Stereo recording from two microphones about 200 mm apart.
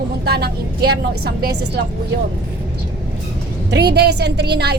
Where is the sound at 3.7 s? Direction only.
55° right (ahead or behind).